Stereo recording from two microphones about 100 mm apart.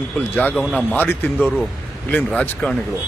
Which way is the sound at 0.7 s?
5° right (ahead or behind).